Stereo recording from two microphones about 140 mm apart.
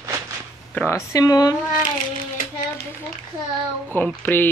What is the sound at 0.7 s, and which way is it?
Speech, 20° left (ahead or behind).